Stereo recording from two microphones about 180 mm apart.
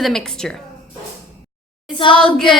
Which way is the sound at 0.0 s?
5° left (ahead or behind).